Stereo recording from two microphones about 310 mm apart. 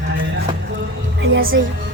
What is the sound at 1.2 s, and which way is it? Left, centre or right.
Speech, right.